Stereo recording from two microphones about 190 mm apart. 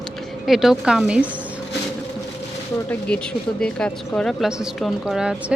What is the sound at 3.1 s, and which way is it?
Speech, 5° left (ahead or behind).